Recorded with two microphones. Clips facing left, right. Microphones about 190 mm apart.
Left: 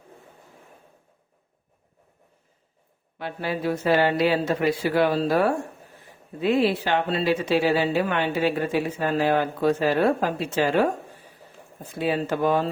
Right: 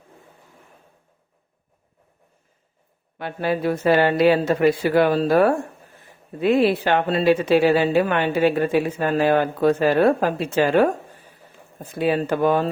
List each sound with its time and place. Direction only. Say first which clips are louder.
3.2 s speech: right 5 dB; 55° right (ahead or behind)
11.9 s speech: right 4 dB; 55° right (ahead or behind)